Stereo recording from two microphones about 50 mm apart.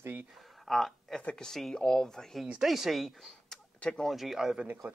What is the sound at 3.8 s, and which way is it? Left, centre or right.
Speech, centre.